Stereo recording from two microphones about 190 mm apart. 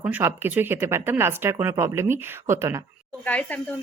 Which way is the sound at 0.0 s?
10° right (ahead or behind).